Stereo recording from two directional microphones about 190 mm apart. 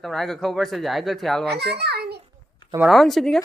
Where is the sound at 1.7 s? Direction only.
60° right (ahead or behind).